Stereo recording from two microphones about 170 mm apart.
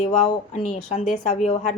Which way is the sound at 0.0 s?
40° left (ahead or behind).